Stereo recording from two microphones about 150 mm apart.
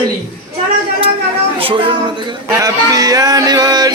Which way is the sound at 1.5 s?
35° right (ahead or behind).